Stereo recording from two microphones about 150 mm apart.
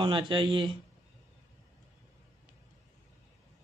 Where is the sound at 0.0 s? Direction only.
30° right (ahead or behind).